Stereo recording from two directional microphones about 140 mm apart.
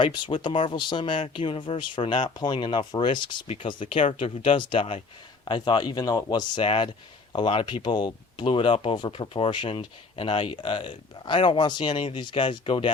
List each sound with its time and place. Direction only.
0.4 s speech: 35° left (ahead or behind)